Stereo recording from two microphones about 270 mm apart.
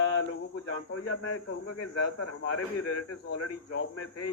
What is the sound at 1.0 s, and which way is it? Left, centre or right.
A man's voice, left.